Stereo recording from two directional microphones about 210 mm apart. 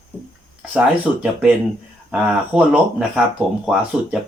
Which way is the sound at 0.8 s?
5° right (ahead or behind).